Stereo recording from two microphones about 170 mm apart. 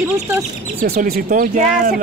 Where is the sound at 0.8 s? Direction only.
65° right (ahead or behind); by 2.0 s 50° right (ahead or behind).